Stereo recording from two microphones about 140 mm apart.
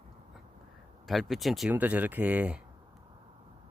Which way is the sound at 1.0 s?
Centre (ahead or behind).